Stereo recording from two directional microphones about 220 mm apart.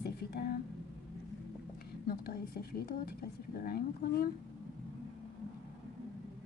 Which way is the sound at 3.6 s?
45° left (ahead or behind).